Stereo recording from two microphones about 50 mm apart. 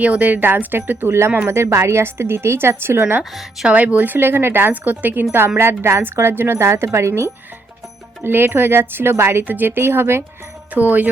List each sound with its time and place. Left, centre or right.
0.0 s speech: right
1.5 s speech: right
3.7 s speech: right
4.7 s speech: right
5.5 s speech: right
8.2 s speech: right
9.5 s speech: right
10.8 s speech: right